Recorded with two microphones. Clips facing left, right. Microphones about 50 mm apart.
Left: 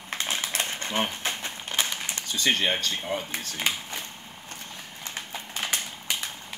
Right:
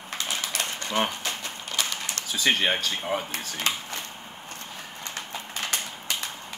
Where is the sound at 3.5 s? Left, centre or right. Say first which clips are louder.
Even; centre.